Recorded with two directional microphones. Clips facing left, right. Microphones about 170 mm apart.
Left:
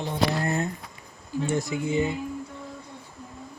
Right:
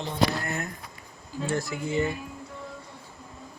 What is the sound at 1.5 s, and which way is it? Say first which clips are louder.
Speech: left 2 dB; 20° left (ahead or behind).